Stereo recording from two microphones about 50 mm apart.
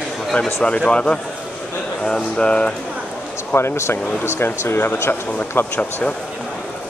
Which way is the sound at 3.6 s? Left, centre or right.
Left.